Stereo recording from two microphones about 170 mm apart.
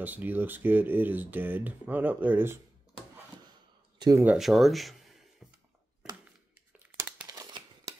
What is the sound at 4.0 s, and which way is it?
Speech, 15° right (ahead or behind).